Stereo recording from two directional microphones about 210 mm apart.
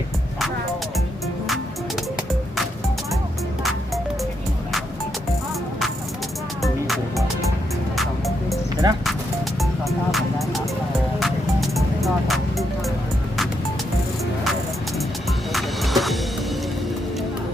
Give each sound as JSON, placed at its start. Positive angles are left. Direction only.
{"t": 6.6, "sound": "music", "side_deg": 0}
{"t": 8.8, "sound": "speech", "side_deg": -20}
{"t": 10.1, "sound": "music", "side_deg": 0}
{"t": 15.5, "sound": "music", "side_deg": 0}